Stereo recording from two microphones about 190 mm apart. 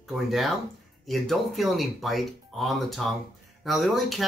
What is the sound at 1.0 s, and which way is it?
Speech, centre (ahead or behind).